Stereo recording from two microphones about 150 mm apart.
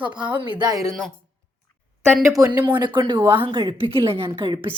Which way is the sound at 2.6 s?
30° right (ahead or behind).